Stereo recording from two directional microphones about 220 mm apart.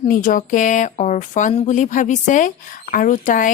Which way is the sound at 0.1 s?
35° left (ahead or behind).